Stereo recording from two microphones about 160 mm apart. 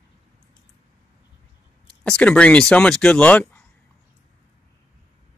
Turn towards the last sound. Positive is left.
turn(degrees=10)  # may be behind; listen again after turning